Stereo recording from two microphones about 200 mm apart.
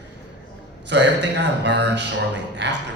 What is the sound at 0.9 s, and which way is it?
Speech, 60° right (ahead or behind).